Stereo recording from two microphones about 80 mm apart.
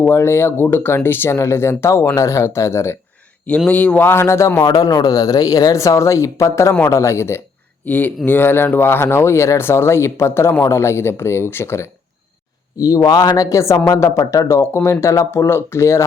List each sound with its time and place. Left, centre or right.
0.0 s speech: left
3.7 s speech: centre; by 4.6 s left
4.6 s speech: left
7.9 s speech: left
12.7 s speech: left
13.7 s speech: left
14.0 s speech: left